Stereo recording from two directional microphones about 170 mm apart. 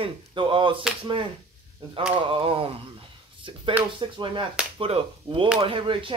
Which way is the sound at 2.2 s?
30° right (ahead or behind).